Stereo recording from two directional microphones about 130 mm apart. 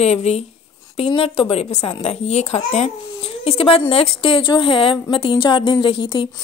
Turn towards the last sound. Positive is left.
turn(degrees=40)  # may be behind; listen again after turning